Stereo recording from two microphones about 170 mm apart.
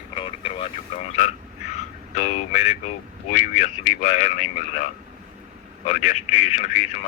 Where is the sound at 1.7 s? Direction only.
45° left (ahead or behind).